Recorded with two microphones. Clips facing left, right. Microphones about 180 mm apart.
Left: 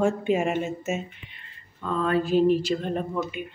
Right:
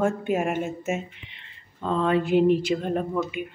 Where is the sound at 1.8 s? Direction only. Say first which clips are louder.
Right 2 dB; 25° right (ahead or behind).